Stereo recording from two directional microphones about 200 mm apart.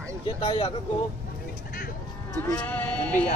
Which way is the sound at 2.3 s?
5° left (ahead or behind).